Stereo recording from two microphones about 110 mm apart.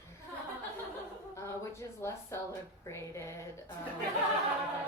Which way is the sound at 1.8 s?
25° left (ahead or behind).